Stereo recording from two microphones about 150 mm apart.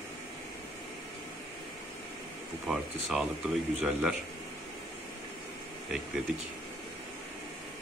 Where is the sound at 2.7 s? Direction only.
5° right (ahead or behind).